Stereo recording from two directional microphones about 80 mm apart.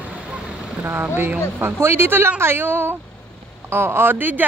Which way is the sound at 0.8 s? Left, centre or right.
Right.